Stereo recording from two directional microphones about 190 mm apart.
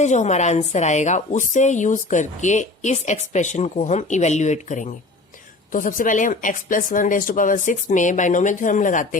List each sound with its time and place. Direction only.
0.0 s a woman's voice: 40° left (ahead or behind)